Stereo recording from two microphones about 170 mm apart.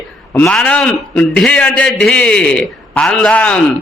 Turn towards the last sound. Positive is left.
turn(degrees=5)  # may be behind; listen again after turning